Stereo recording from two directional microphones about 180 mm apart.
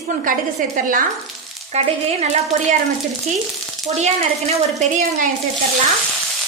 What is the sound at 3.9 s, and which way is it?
Speech, 35° right (ahead or behind).